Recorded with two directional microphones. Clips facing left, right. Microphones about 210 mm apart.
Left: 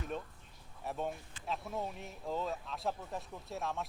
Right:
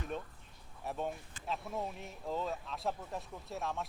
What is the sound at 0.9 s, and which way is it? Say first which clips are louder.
Speech: even; centre (ahead or behind).